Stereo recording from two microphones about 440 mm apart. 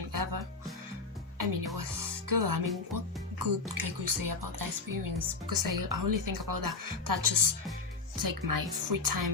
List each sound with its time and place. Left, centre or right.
0.1 s music: right
3.3 s a woman's voice: right